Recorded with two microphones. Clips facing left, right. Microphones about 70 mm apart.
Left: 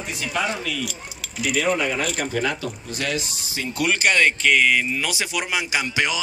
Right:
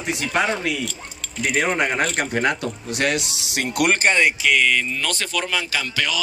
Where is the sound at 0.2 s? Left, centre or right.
Right.